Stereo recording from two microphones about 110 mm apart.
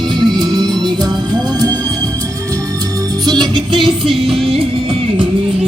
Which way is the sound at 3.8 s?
Centre (ahead or behind).